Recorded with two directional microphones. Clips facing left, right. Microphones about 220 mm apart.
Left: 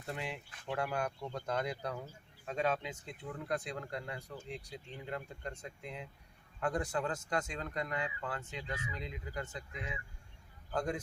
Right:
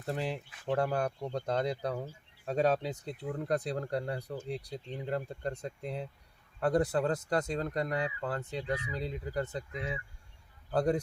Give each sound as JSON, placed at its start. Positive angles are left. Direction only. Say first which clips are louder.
{"t": 0.0, "sound": "speech", "louder": "right 7 dB", "side_deg": -35}